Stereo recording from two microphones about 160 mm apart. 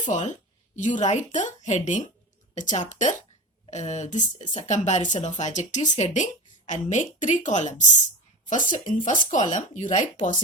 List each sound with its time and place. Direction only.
0.0 s a woman's voice: 50° left (ahead or behind)